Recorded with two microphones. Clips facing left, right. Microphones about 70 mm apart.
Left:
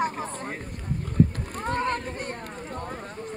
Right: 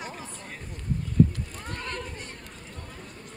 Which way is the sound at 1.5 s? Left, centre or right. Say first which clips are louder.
Left 11 dB; left.